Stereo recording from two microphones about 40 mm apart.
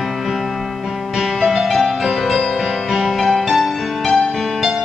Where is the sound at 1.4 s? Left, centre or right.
Centre.